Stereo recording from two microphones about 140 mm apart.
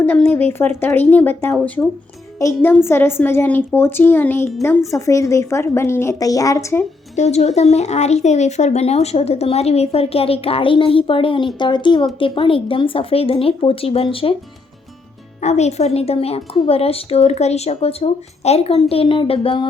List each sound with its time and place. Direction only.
0.0 s a child's voice: 15° left (ahead or behind)
7.2 s speech: 55° left (ahead or behind)
15.4 s speech: 55° left (ahead or behind)